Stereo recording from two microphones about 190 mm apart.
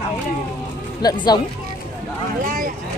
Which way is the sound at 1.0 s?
20° left (ahead or behind).